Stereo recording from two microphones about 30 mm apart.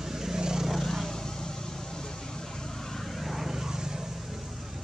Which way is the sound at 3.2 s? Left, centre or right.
Centre.